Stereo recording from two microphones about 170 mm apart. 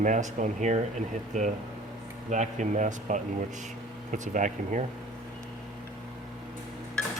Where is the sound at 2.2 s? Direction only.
45° right (ahead or behind).